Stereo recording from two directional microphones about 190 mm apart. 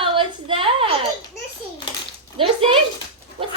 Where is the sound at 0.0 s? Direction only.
25° right (ahead or behind).